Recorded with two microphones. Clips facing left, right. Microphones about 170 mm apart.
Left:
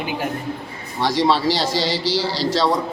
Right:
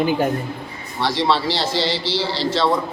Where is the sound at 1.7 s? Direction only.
40° left (ahead or behind).